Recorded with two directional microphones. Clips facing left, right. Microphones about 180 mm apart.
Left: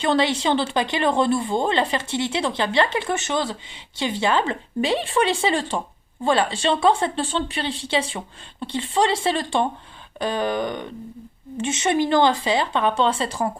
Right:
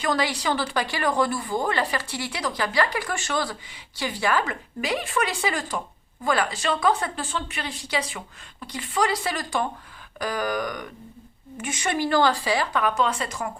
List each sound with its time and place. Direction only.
0.0 s speech: 25° left (ahead or behind)